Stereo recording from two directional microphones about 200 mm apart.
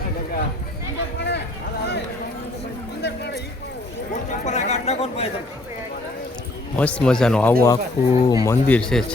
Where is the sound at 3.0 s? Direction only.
55° left (ahead or behind).